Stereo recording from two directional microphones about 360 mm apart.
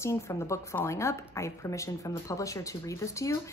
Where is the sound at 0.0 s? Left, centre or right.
Centre.